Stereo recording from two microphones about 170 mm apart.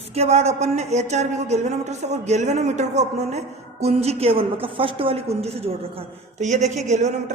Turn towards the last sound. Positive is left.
turn(degrees=-45)  # may be behind; listen again after turning